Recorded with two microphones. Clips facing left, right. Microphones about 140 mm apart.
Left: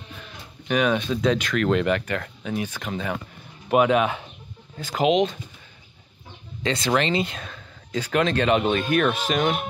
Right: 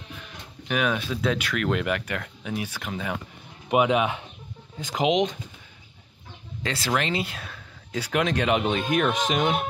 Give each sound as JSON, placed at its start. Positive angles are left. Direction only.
{"t": 0.7, "sound": "speech", "side_deg": -5}
{"t": 6.6, "sound": "speech", "side_deg": -5}